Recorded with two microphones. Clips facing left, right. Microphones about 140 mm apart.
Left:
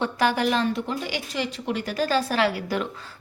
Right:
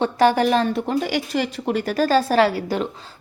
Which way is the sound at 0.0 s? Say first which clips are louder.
Right 6 dB; 35° right (ahead or behind).